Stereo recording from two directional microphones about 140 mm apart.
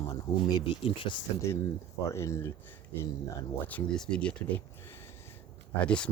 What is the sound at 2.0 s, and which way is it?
Speech, 20° left (ahead or behind).